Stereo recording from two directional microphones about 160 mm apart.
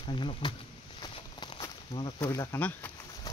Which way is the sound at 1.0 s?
30° left (ahead or behind).